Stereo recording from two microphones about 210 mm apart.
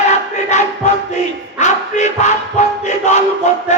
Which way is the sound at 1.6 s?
35° left (ahead or behind).